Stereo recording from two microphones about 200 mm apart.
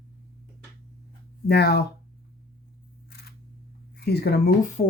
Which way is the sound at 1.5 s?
55° left (ahead or behind).